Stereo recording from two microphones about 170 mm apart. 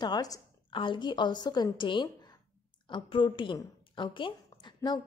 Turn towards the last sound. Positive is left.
turn(degrees=25)  # may be behind; listen again after turning